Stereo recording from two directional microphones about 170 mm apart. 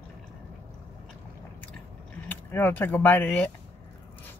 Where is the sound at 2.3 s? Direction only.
10° left (ahead or behind).